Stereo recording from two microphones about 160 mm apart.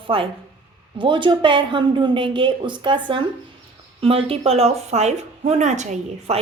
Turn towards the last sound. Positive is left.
turn(degrees=-50)  # may be behind; listen again after turning